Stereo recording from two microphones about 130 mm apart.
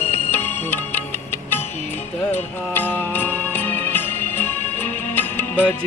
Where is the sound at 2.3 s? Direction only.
15° left (ahead or behind).